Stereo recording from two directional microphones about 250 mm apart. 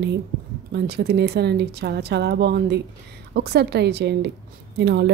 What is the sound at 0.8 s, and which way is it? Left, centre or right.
A woman's voice, right.